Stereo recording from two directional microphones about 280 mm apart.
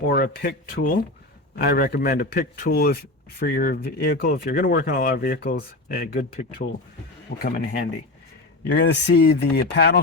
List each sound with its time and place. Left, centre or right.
0.1 s a man's voice: left